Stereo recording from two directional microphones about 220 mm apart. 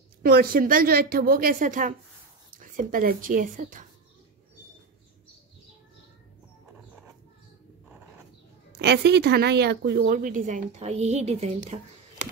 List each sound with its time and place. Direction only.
0.2 s a woman's voice: 40° right (ahead or behind)
8.7 s a woman's voice: 50° right (ahead or behind); by 12.3 s 30° right (ahead or behind)